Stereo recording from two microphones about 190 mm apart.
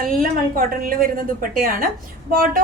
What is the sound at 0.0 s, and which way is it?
A woman's voice, 50° right (ahead or behind).